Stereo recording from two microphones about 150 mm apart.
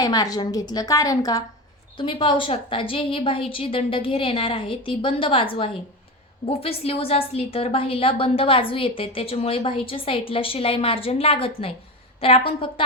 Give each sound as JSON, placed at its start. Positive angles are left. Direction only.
{"t": 0.0, "sound": "a woman's voice", "side_deg": 25}